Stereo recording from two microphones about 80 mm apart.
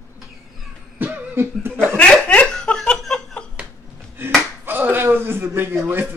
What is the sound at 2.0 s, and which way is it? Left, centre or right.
Laughter, centre.